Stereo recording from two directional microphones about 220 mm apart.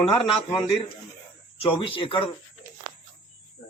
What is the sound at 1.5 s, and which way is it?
Speech, 25° left (ahead or behind).